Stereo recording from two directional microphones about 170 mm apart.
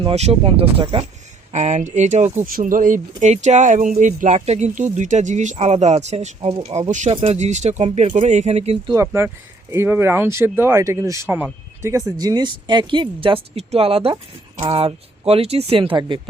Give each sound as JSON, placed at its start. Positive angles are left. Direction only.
{"t": 0.0, "sound": "speech", "side_deg": -40}
{"t": 1.5, "sound": "speech", "side_deg": -45}
{"t": 8.9, "sound": "speech", "side_deg": -15}